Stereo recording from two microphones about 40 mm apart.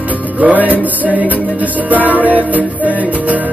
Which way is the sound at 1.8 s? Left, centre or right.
Right.